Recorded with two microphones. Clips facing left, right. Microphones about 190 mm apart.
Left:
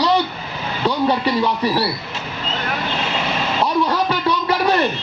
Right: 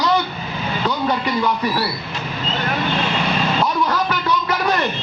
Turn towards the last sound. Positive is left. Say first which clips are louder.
# left 2 dB
turn(degrees=30)  # may be behind; listen again after turning